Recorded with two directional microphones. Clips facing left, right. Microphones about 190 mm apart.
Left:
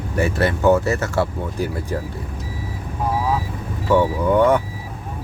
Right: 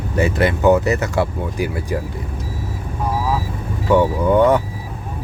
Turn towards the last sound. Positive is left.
turn(degrees=-20)  # may be behind; listen again after turning